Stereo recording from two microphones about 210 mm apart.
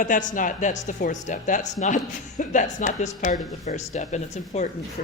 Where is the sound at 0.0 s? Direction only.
40° left (ahead or behind).